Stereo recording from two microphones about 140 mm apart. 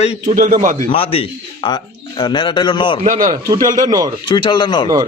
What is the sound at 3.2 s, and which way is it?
Speech, 25° right (ahead or behind).